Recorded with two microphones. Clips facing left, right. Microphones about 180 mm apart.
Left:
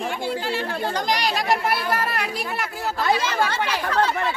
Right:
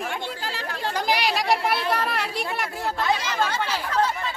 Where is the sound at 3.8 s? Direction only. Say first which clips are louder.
Left 4 dB; 70° left (ahead or behind).